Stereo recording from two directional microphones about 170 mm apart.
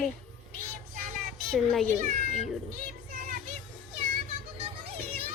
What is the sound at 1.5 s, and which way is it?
Speech, centre (ahead or behind).